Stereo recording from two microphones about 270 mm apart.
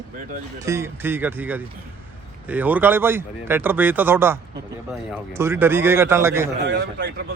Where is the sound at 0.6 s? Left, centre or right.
Centre.